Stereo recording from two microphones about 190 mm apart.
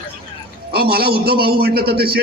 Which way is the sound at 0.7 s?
55° right (ahead or behind).